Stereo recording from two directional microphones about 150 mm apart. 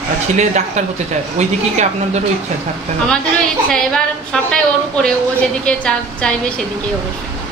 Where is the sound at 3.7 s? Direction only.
5° left (ahead or behind).